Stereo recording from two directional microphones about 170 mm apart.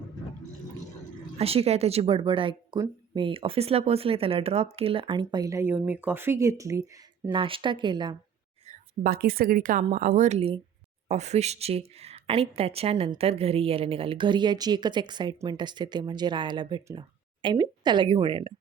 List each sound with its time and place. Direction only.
1.4 s speech: 35° right (ahead or behind); by 6.8 s 20° right (ahead or behind)
7.3 s speech: 30° right (ahead or behind)
8.6 s a woman's voice: 55° right (ahead or behind); by 18.5 s 30° right (ahead or behind)